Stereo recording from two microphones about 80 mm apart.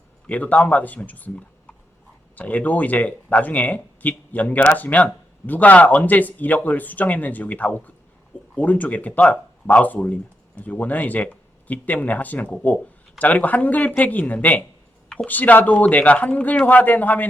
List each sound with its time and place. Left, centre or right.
0.3 s speech: centre